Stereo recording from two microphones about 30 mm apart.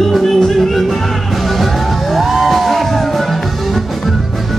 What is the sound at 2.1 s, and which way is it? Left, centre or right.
Music, centre.